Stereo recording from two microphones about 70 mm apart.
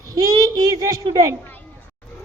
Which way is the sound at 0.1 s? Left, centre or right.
Right.